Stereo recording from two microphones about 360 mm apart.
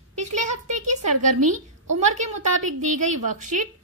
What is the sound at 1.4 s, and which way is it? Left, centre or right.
Speech, right.